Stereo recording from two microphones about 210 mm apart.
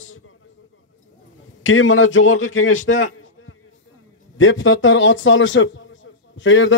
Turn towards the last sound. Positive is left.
turn(degrees=60)  # may be behind; listen again after turning